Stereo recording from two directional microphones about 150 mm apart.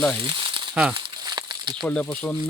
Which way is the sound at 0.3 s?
35° right (ahead or behind).